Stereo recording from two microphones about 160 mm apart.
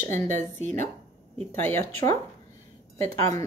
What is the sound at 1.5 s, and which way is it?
Speech, 15° left (ahead or behind).